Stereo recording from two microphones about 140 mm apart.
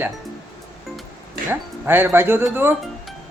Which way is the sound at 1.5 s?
15° right (ahead or behind).